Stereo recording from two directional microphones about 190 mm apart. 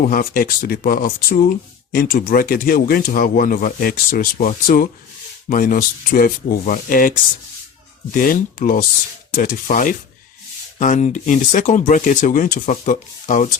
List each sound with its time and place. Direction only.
0.1 s speech: 50° left (ahead or behind)